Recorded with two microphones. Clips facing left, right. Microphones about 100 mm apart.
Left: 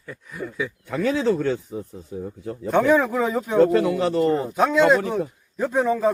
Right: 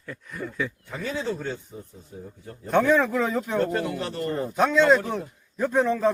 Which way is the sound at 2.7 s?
5° left (ahead or behind).